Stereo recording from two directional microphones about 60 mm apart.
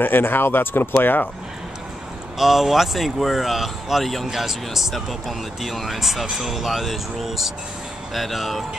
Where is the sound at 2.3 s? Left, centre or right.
Centre.